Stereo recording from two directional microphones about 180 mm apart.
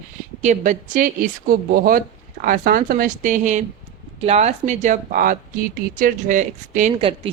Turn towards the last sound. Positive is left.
turn(degrees=-45)  # may be behind; listen again after turning